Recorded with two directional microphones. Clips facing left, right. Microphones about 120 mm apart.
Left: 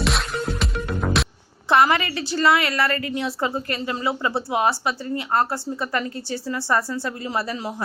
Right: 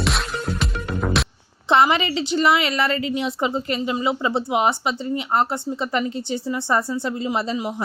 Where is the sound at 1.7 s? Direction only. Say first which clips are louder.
Right 1 dB; 20° right (ahead or behind).